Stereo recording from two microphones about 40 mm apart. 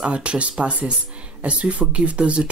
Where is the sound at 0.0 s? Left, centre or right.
Right.